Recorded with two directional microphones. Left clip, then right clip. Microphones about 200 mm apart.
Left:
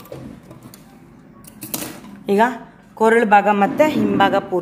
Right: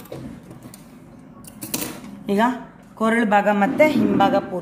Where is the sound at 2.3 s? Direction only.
45° left (ahead or behind).